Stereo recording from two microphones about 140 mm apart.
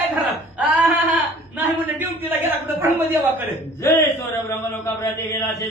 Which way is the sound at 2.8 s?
15° right (ahead or behind).